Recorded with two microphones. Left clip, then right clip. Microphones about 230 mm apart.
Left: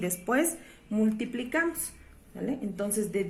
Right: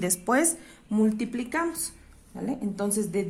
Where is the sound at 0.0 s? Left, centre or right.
Right.